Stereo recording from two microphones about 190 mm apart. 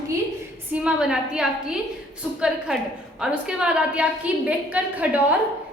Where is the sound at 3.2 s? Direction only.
5° right (ahead or behind).